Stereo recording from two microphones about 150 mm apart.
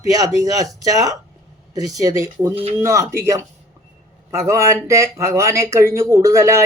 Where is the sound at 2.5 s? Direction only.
40° right (ahead or behind).